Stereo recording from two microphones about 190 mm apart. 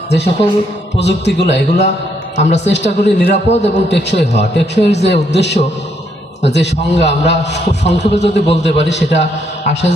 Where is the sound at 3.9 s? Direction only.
65° left (ahead or behind).